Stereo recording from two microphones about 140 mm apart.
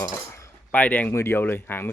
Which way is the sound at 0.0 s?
20° left (ahead or behind).